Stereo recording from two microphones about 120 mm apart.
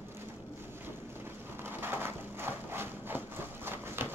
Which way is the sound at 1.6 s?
20° right (ahead or behind).